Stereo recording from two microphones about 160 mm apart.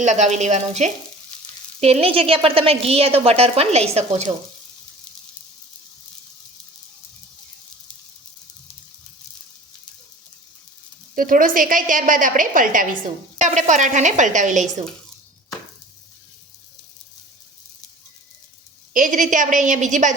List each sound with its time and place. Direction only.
0.0 s a woman's voice: 45° right (ahead or behind)
11.1 s a woman's voice: 60° right (ahead or behind)
18.9 s a woman's voice: 55° right (ahead or behind)